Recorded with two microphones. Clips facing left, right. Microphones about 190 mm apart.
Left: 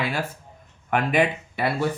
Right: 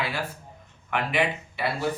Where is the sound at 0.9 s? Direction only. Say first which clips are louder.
Left 5 dB; 45° left (ahead or behind).